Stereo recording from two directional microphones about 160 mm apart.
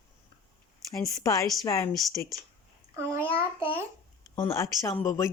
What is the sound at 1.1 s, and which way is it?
A woman's voice, 20° left (ahead or behind).